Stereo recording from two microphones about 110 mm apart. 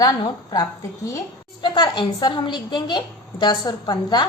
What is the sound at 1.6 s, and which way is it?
A woman's voice, 40° left (ahead or behind).